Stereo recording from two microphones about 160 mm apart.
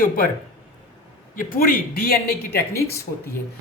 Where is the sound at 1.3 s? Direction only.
60° left (ahead or behind).